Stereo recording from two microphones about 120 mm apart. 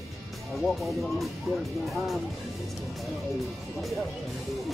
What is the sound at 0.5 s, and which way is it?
Speech, centre (ahead or behind).